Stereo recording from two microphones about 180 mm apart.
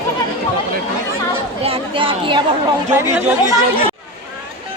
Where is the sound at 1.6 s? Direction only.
30° right (ahead or behind).